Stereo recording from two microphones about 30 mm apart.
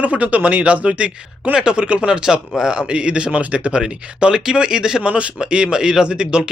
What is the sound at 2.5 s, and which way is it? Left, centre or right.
Speech, right.